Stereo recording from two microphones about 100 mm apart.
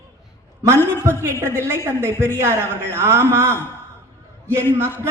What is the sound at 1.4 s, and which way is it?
A woman's voice, 25° right (ahead or behind).